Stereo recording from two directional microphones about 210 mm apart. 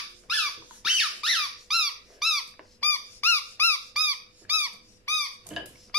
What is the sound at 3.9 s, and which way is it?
Squeak, 10° right (ahead or behind).